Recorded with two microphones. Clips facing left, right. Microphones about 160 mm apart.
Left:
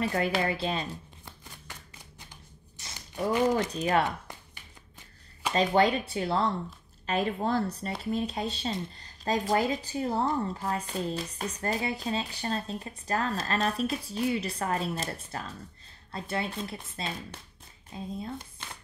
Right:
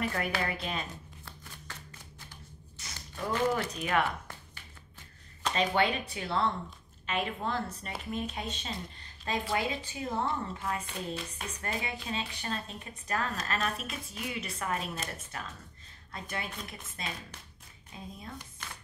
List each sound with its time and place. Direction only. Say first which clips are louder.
0.0 s speech: left 5 dB; 25° left (ahead or behind)
1.2 s shuffling cards: even; 15° left (ahead or behind)
3.3 s speech: left 4 dB; 15° left (ahead or behind)
3.7 s speech: left 4 dB; 35° left (ahead or behind)
5.5 s speech: left 5 dB; 35° left (ahead or behind)